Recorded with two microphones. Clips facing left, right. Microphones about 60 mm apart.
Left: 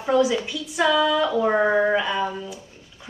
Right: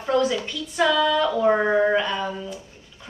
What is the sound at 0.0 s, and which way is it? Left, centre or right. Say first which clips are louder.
A woman's voice: left 2 dB; centre.